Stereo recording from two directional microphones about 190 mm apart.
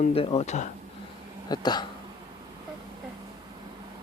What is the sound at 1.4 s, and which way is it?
Speech, 20° left (ahead or behind).